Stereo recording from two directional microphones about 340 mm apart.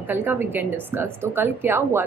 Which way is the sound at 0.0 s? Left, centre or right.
Centre.